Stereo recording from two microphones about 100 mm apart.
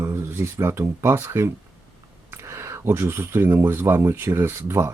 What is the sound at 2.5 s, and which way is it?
Speech, 25° right (ahead or behind).